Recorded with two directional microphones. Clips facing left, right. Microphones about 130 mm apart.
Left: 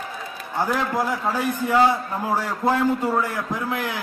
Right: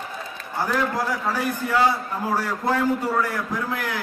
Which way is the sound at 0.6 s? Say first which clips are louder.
Left 1 dB; 15° left (ahead or behind).